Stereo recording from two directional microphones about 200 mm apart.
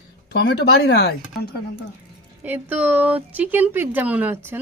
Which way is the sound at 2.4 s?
10° right (ahead or behind).